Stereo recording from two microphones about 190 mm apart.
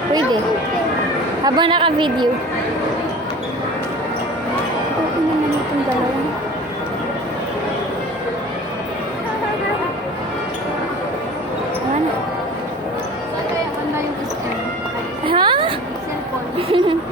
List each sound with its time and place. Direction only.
1.5 s a woman's voice: 25° right (ahead or behind)
15.3 s music: 25° right (ahead or behind)
16.6 s a sound: 30° right (ahead or behind)